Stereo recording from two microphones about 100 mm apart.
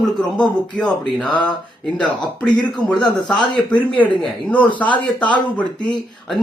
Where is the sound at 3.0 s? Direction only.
10° left (ahead or behind).